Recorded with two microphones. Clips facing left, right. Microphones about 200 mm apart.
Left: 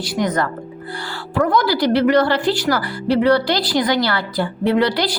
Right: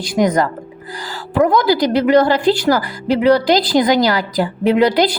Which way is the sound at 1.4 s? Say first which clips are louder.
Right 4 dB; 20° right (ahead or behind).